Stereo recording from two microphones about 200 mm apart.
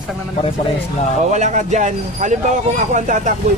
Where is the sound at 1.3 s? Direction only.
35° right (ahead or behind).